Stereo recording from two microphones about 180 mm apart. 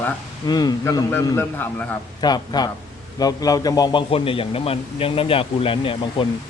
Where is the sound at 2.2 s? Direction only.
20° left (ahead or behind).